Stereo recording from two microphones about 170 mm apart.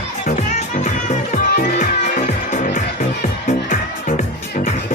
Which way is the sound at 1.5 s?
45° left (ahead or behind).